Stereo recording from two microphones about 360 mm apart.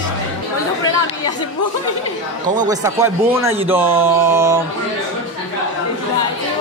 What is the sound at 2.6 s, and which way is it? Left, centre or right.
Speech, centre.